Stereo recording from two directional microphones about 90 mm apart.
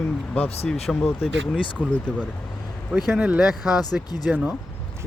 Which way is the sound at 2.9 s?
10° right (ahead or behind).